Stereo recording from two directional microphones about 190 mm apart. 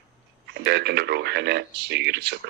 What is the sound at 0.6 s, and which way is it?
Speech, 60° right (ahead or behind).